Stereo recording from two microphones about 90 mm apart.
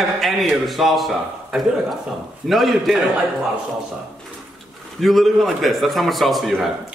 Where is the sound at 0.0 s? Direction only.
Centre (ahead or behind).